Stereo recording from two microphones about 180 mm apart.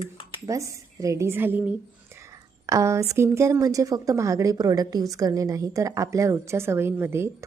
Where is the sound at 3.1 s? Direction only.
15° right (ahead or behind).